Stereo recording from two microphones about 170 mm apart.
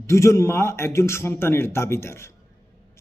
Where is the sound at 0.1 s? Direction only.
15° left (ahead or behind).